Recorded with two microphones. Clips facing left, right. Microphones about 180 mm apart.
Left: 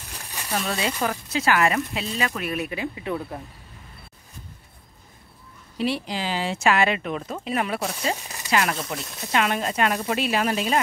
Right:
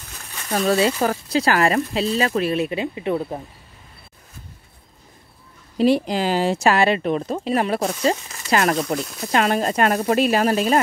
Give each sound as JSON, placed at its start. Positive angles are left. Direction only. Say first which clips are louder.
{"t": 0.5, "sound": "speech", "louder": "right 8 dB", "side_deg": -35}
{"t": 5.8, "sound": "speech", "louder": "right 8 dB", "side_deg": -45}